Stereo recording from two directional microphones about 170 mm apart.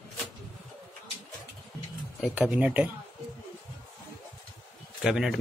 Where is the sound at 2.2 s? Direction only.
5° right (ahead or behind).